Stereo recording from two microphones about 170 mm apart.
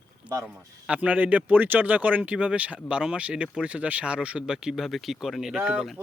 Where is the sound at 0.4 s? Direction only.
5° right (ahead or behind).